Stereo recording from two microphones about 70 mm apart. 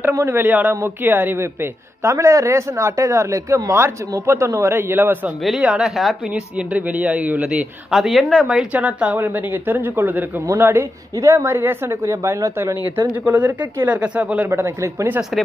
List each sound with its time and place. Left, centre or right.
0.1 s a woman's voice: right
0.4 s a man's voice: right
5.4 s speech: centre
6.3 s a man's voice: centre
7.4 s speech: centre
8.7 s a man's voice: right
12.5 s a man's voice: right; by 14.5 s centre
14.5 s a woman's voice: right
15.3 s speech: centre